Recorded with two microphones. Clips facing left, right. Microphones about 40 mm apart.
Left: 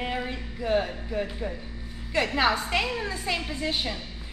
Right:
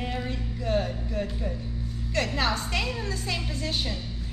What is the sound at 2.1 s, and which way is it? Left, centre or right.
Music, centre.